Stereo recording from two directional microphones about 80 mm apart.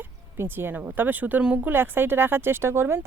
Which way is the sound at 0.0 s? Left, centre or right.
Right.